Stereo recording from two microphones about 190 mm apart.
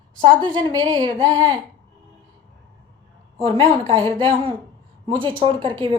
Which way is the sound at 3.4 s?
30° right (ahead or behind).